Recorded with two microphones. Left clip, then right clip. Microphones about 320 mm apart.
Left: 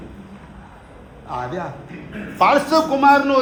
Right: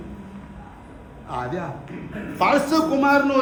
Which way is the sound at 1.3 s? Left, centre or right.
Centre.